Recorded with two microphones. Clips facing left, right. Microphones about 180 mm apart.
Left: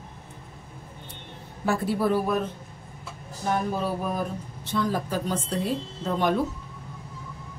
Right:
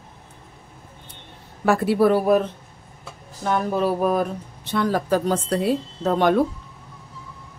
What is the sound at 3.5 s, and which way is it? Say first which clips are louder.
Speech: right 5 dB; 65° right (ahead or behind).